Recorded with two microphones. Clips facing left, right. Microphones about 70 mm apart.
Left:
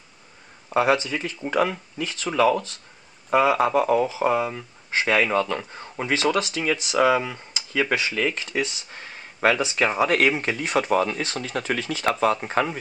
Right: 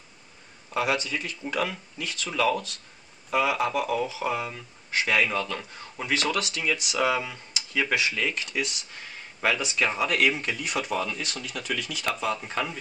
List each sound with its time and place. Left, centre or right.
0.7 s speech: left
8.2 s speech: centre
9.6 s speech: left
9.9 s speech: left
12.2 s speech: left